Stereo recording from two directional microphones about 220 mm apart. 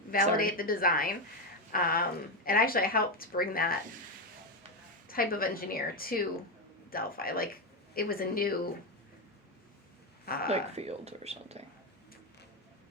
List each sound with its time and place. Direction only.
0.3 s speech: 40° left (ahead or behind)
5.0 s speech: 40° left (ahead or behind)
10.2 s speech: 45° left (ahead or behind)
10.5 s speech: 30° right (ahead or behind)